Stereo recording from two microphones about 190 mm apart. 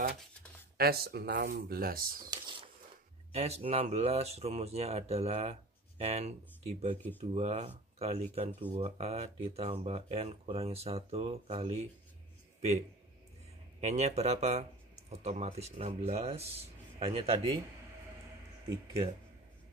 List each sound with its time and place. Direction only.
0.7 s speech: 55° right (ahead or behind)
2.3 s a sound: 25° right (ahead or behind)
3.3 s speech: 35° right (ahead or behind)
13.7 s speech: 35° right (ahead or behind)